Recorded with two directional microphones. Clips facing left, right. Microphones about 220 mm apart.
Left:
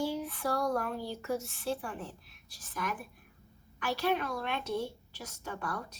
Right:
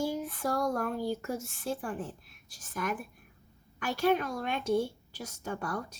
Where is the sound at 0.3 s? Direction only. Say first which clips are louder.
Right 1 dB; 45° right (ahead or behind).